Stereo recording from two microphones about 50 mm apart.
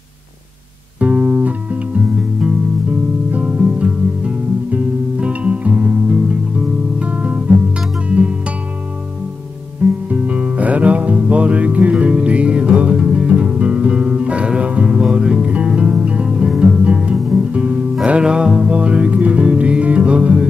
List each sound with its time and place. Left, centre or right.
0.9 s music: right
3.3 s music: right
7.0 s guitar: right
8.1 s music: right
10.0 s music: right